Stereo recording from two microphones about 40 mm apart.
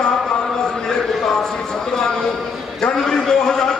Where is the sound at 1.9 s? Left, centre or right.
Centre.